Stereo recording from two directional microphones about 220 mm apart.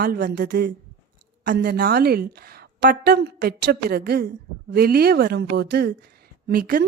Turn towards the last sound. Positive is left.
turn(degrees=-40)  # may be behind; listen again after turning